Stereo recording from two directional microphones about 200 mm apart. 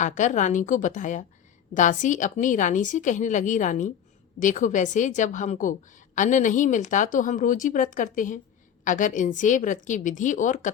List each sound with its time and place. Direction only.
0.0 s a woman's voice: 40° left (ahead or behind)